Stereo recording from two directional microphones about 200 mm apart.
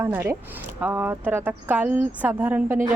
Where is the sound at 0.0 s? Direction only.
10° right (ahead or behind).